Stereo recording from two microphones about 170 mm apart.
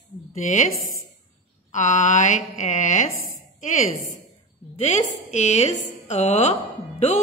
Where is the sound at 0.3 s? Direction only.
45° left (ahead or behind).